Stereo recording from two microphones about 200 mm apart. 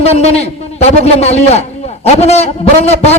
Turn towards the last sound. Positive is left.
turn(degrees=30)  # may be behind; listen again after turning